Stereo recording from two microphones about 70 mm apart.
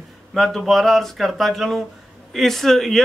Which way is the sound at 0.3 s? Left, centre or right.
Centre.